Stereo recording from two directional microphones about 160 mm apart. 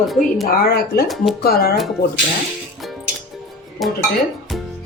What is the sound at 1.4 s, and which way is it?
Speech, 75° left (ahead or behind).